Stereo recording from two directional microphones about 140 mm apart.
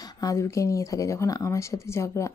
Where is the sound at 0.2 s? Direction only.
25° left (ahead or behind).